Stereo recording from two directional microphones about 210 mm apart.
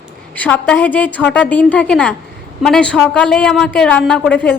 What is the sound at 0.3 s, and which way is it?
A woman's voice, 5° left (ahead or behind).